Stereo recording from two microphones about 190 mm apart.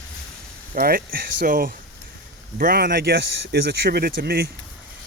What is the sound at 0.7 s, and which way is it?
Speech, 50° right (ahead or behind).